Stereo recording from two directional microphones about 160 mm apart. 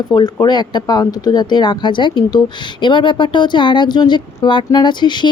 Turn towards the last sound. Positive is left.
turn(degrees=30)  # may be behind; listen again after turning